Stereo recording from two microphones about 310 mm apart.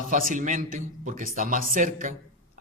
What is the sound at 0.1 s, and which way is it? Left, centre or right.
Speech, right.